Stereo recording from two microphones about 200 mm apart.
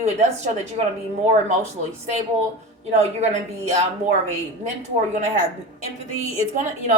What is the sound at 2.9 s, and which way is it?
Speech, 35° right (ahead or behind).